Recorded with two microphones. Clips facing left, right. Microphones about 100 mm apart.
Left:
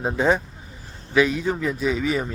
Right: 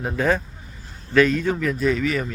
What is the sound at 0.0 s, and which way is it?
Speech, 20° left (ahead or behind).